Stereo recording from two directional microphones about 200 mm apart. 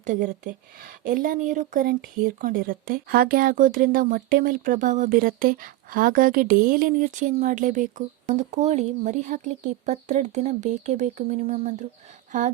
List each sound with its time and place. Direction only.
0.0 s speech: 40° right (ahead or behind)